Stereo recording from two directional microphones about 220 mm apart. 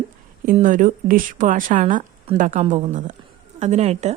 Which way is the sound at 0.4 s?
35° right (ahead or behind).